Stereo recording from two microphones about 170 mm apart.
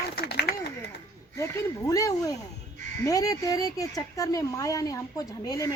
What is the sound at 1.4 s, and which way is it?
A woman's voice, 20° left (ahead or behind).